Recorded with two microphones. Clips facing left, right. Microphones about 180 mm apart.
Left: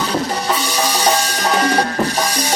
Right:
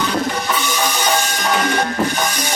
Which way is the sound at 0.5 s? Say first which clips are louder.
Left 1 dB; 35° left (ahead or behind).